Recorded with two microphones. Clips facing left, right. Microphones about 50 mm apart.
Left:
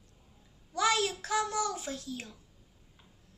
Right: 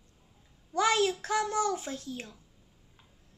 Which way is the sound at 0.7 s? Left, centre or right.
Right.